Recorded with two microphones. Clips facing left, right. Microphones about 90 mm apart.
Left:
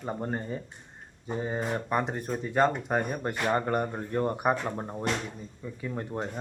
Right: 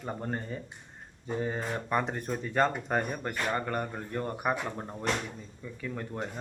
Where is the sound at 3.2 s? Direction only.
25° left (ahead or behind).